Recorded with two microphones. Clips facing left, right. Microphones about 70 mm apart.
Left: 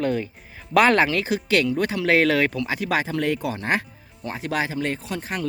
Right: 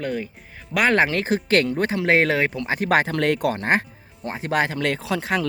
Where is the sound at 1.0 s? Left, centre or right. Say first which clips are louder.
Right 1 dB; right.